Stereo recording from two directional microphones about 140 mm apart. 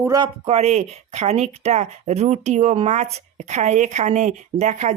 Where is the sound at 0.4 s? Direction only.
50° right (ahead or behind).